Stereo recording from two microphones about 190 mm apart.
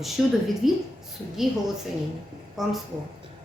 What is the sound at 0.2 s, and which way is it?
A woman's voice, centre (ahead or behind).